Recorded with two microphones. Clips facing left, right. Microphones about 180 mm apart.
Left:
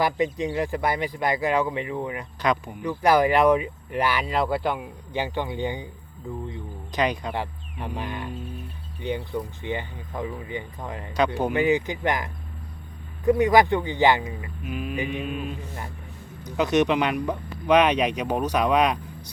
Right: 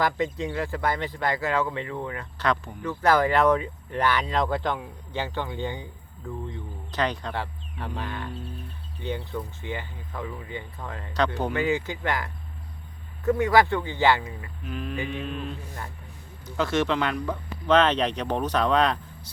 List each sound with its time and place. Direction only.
0.0 s speech: 15° left (ahead or behind)